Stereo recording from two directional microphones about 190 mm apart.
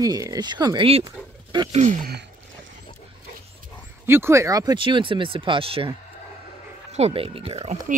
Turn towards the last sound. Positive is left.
turn(degrees=-35)  # may be behind; listen again after turning